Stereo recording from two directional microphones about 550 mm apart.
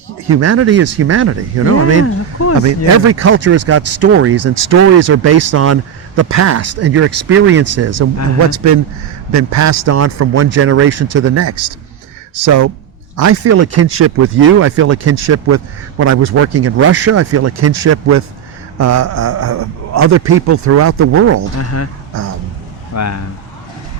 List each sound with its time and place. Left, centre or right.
0.3 s speech: right
9.3 s speech: right
21.6 s speech: left
23.0 s speech: left